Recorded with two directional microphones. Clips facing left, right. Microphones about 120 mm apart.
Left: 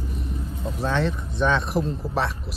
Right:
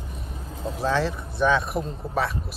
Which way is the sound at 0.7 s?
5° right (ahead or behind).